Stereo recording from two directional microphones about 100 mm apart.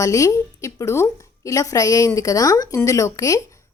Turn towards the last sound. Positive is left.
turn(degrees=35)  # may be behind; listen again after turning